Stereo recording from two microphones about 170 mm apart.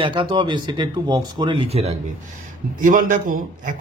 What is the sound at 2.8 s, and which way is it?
Speech, 55° right (ahead or behind).